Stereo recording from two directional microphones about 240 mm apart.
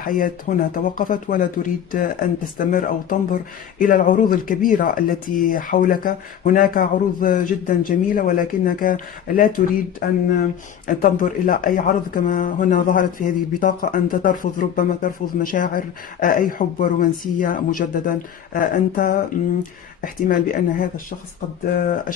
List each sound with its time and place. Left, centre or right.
0.0 s speech: left